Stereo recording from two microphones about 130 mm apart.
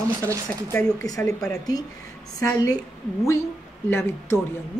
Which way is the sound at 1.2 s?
5° left (ahead or behind).